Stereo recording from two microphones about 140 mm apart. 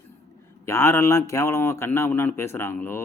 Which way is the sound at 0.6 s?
15° left (ahead or behind).